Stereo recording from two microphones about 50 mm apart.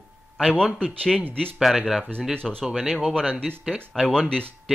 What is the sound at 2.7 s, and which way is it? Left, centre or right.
Speech, centre.